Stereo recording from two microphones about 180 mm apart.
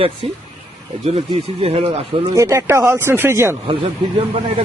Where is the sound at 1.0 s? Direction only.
35° right (ahead or behind).